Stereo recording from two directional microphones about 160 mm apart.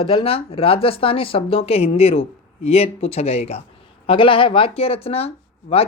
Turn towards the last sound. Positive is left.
turn(degrees=40)  # may be behind; listen again after turning